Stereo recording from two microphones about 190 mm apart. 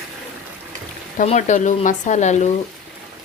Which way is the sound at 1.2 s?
40° left (ahead or behind).